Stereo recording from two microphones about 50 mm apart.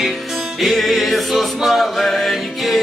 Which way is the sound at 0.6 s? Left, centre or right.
Centre.